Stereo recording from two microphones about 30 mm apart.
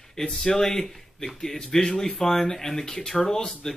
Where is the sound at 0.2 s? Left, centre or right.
Centre.